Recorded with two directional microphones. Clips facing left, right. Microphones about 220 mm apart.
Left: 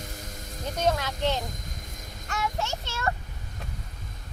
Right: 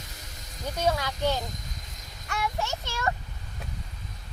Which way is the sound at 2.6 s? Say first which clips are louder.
Even; 15° right (ahead or behind).